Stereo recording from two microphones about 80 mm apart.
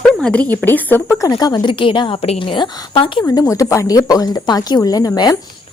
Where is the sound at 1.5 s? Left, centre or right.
Left.